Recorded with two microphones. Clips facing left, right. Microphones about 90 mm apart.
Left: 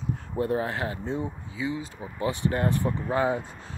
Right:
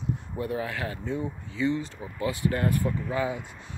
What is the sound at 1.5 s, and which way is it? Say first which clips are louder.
Speech: right 4 dB; 10° left (ahead or behind).